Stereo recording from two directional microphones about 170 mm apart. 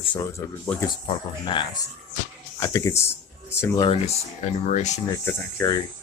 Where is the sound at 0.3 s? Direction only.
15° left (ahead or behind).